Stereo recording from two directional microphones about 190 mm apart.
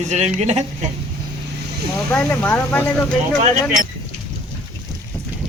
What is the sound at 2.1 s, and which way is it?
Speech, 5° left (ahead or behind).